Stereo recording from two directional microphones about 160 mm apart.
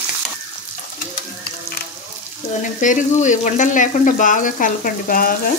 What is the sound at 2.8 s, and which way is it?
Speech, 50° left (ahead or behind).